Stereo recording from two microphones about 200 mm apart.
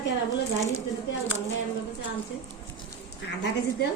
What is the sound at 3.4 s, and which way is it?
Speech, 60° left (ahead or behind).